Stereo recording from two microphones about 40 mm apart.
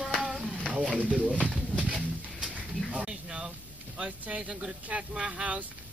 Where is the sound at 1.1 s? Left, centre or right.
Right.